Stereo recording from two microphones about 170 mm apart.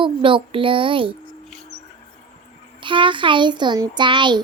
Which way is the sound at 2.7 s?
30° right (ahead or behind).